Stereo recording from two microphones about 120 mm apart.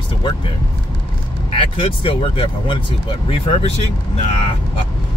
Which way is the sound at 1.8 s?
45° left (ahead or behind).